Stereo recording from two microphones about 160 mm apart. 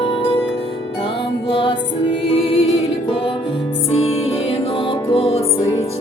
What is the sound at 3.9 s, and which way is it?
Music, 40° left (ahead or behind).